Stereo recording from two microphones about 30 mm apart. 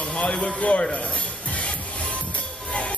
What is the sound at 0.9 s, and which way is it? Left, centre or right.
Music, left.